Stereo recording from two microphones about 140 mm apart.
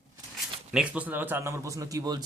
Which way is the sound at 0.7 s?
10° right (ahead or behind).